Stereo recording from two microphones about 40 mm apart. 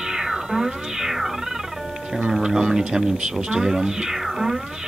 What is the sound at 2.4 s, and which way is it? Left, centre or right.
Cat, centre.